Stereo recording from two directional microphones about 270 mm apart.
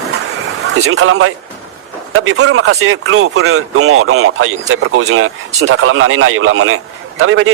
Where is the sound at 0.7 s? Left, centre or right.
Right.